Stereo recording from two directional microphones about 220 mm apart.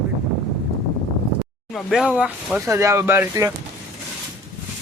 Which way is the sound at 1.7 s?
Centre (ahead or behind).